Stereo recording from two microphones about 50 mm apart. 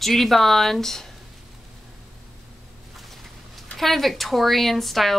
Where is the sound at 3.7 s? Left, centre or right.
Centre.